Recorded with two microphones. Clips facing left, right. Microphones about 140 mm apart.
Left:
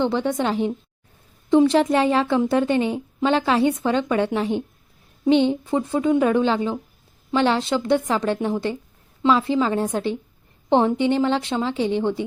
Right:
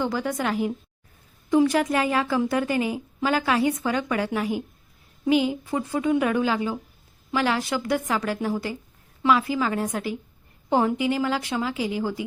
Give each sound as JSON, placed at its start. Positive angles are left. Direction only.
{"t": 0.0, "sound": "a woman's voice", "side_deg": 25}